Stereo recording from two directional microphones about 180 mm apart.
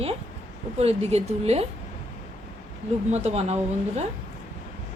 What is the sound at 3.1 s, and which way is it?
Speech, 35° right (ahead or behind).